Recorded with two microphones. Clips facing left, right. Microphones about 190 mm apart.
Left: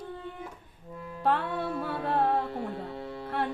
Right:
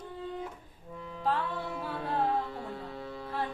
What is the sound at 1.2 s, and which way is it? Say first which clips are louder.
Music: left 4 dB; 65° left (ahead or behind).